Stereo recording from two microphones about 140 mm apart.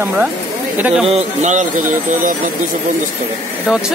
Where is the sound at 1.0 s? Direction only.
50° right (ahead or behind).